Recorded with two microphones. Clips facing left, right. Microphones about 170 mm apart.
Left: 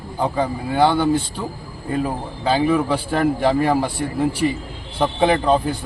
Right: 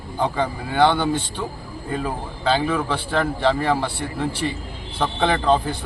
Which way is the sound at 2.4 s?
10° left (ahead or behind).